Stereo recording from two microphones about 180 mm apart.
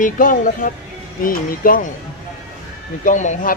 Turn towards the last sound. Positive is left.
turn(degrees=45)  # may be behind; listen again after turning